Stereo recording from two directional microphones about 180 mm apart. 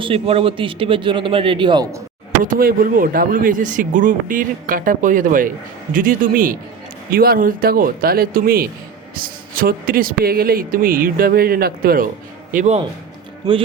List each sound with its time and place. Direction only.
0.0 s speech: 30° right (ahead or behind)
2.4 s speech: 50° right (ahead or behind)